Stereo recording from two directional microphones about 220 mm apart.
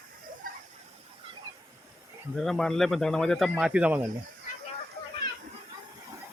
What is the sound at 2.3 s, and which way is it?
Speech, centre (ahead or behind).